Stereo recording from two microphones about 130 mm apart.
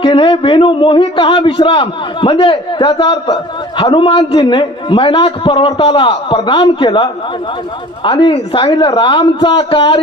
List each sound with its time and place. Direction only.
0.0 s a man's voice: 40° left (ahead or behind)